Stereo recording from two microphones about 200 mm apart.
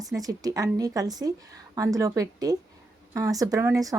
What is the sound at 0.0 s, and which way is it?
Speech, 15° right (ahead or behind).